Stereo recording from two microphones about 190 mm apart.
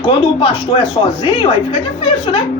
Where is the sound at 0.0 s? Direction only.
25° left (ahead or behind).